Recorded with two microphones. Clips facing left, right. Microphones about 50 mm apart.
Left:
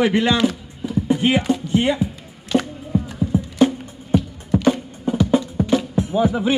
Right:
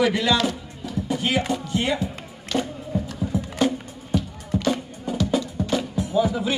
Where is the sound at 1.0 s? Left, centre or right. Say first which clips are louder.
Left 6 dB; left.